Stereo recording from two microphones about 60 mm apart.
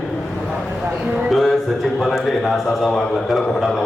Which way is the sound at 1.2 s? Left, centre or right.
Centre.